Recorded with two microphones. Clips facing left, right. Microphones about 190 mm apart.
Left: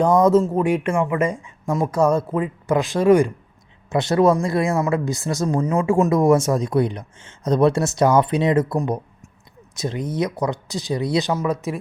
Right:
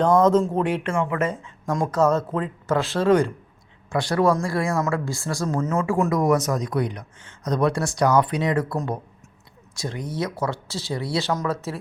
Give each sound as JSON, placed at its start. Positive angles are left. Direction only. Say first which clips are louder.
{"t": 0.0, "sound": "speech", "louder": "left 2 dB", "side_deg": 10}
{"t": 5.9, "sound": "speech", "louder": "left 5 dB", "side_deg": 25}